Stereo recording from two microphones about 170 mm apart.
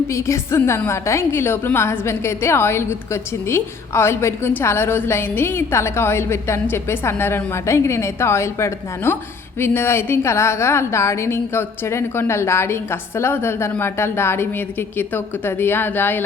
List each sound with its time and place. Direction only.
0.1 s a woman's voice: 15° left (ahead or behind)